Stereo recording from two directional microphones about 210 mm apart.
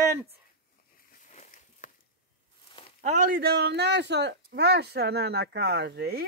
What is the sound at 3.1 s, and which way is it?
Speech, 45° right (ahead or behind).